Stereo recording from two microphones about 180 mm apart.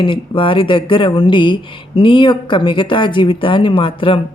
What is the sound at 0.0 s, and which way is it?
A woman's voice, 30° left (ahead or behind).